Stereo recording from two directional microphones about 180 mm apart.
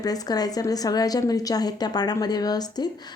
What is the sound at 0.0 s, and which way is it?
A woman's voice, 20° left (ahead or behind).